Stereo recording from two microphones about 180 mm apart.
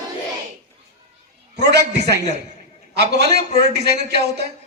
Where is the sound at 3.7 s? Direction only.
65° right (ahead or behind).